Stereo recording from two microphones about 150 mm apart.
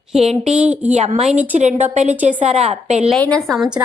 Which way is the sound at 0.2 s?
45° right (ahead or behind).